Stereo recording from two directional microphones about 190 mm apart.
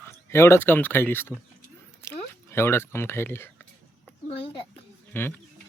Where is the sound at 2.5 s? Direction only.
10° left (ahead or behind).